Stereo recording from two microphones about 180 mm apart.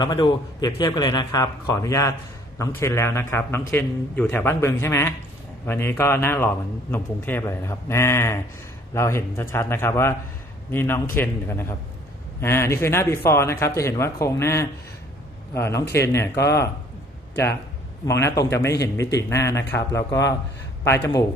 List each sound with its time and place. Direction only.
0.0 s a man's voice: 25° left (ahead or behind)
18.0 s speech: 15° left (ahead or behind)